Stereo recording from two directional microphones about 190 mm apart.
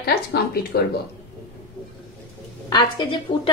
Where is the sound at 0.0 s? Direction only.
55° left (ahead or behind).